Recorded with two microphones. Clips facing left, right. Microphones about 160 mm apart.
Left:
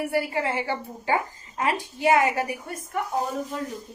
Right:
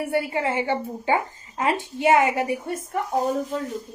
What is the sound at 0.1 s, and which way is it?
A woman's voice, 25° right (ahead or behind).